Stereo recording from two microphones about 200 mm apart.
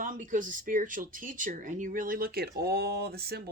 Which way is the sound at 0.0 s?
40° right (ahead or behind).